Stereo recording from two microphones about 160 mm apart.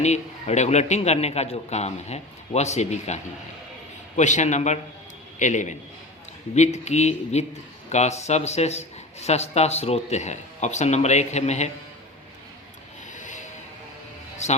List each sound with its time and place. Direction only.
0.0 s speech: 45° left (ahead or behind)
4.2 s speech: 50° left (ahead or behind)
6.8 s speech: 45° left (ahead or behind)
13.1 s a sound: 50° left (ahead or behind)